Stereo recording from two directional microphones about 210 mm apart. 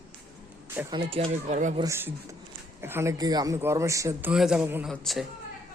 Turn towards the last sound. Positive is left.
turn(degrees=0)  # may be behind; listen again after turning